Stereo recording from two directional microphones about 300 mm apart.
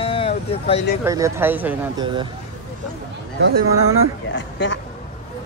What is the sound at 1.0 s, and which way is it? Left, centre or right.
Speech, centre.